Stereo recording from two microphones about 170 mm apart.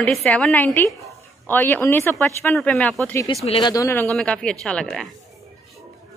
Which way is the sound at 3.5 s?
25° left (ahead or behind).